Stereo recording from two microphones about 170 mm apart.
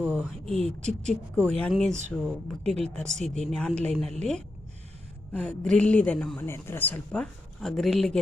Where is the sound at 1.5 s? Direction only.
5° left (ahead or behind).